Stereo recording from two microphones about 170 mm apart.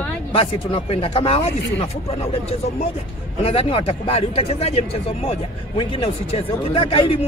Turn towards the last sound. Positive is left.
turn(degrees=30)  # may be behind; listen again after turning